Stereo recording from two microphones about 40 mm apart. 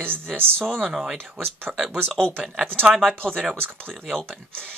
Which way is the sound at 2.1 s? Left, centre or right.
Left.